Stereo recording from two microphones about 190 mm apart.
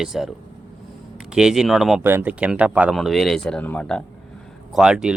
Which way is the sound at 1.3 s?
5° right (ahead or behind).